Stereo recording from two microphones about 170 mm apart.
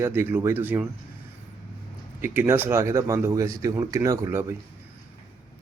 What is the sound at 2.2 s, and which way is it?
Speech, 15° right (ahead or behind).